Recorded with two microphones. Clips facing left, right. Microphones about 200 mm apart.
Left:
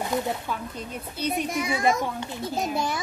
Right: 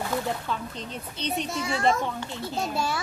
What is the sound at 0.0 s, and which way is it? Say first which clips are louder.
Speech: left 2 dB; 15° left (ahead or behind).